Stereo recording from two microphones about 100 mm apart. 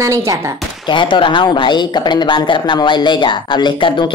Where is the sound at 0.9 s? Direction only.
55° left (ahead or behind).